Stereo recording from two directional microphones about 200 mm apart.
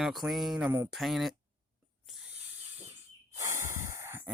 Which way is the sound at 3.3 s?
15° right (ahead or behind).